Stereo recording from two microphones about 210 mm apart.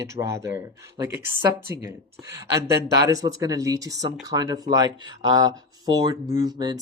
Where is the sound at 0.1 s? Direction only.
15° right (ahead or behind).